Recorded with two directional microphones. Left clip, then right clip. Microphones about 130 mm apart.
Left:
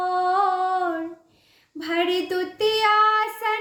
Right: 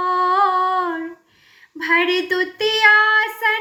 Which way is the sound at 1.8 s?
45° left (ahead or behind).